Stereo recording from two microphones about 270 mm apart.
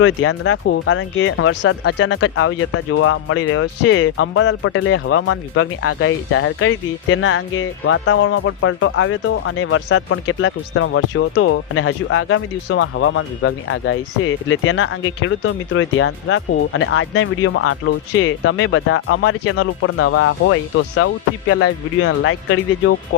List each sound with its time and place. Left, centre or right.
0.0 s speech: left